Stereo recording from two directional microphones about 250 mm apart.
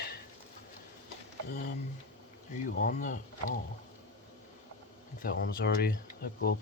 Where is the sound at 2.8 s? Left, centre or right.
Left.